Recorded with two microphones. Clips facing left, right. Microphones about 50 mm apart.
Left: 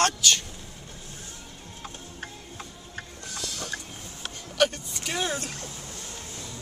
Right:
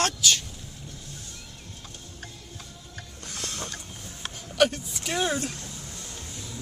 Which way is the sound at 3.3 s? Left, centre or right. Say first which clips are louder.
Right 1 dB; right.